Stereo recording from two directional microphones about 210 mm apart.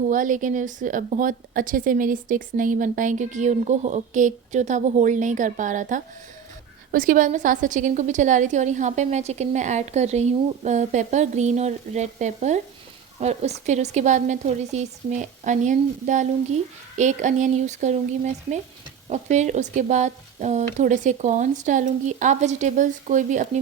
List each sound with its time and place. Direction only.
0.1 s a woman's voice: 40° right (ahead or behind)